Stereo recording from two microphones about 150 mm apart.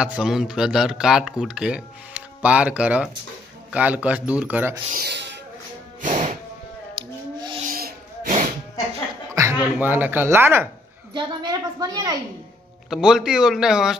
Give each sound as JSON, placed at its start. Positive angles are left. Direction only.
{"t": 0.0, "sound": "a man's voice", "side_deg": -5}
{"t": 5.9, "sound": "music", "side_deg": -60}
{"t": 7.0, "sound": "rub", "side_deg": -30}
{"t": 7.7, "sound": "a sound", "side_deg": -70}
{"t": 9.3, "sound": "speech", "side_deg": -20}
{"t": 11.1, "sound": "a woman's voice", "side_deg": -25}
{"t": 12.9, "sound": "a man's voice", "side_deg": -5}